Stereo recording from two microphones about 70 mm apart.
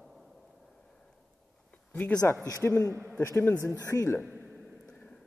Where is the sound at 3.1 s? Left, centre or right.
Left.